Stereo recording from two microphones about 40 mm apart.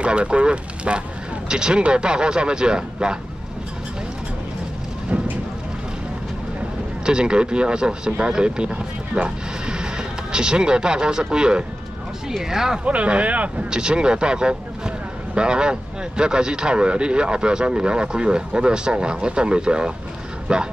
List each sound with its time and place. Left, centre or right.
0.0 s speech: right
5.1 s speech: right
7.1 s speech: right
12.3 s speech: centre
12.8 s speech: right
13.7 s speech: right